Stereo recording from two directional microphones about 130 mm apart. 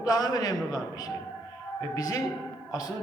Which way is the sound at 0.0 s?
30° left (ahead or behind).